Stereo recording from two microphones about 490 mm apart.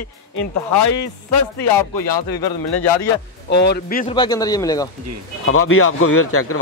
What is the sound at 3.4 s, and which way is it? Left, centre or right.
Speech, centre.